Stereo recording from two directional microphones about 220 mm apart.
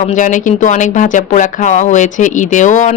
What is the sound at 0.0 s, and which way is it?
A woman's voice, 35° left (ahead or behind).